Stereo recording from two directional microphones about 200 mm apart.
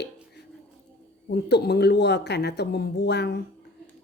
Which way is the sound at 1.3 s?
55° left (ahead or behind).